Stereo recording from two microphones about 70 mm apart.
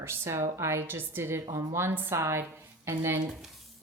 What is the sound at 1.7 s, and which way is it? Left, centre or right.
Speech, right.